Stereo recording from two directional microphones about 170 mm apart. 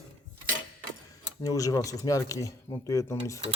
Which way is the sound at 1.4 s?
20° left (ahead or behind).